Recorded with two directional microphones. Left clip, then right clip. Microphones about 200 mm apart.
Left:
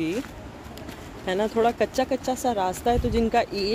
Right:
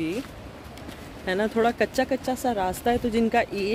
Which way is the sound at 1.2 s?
5° right (ahead or behind).